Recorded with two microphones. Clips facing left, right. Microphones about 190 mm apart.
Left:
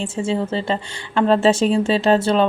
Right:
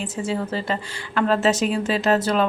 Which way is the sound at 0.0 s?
25° left (ahead or behind).